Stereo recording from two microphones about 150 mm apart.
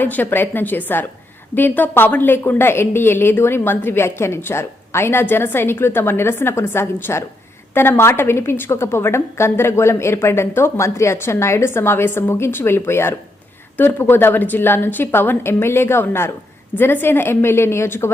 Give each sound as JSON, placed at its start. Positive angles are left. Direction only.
{"t": 0.0, "sound": "a woman's voice", "side_deg": 10}